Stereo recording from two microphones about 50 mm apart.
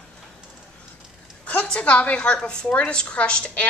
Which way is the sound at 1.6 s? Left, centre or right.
Left.